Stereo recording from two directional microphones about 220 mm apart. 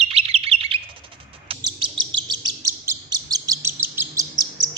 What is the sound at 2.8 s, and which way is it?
Chirp, 15° right (ahead or behind).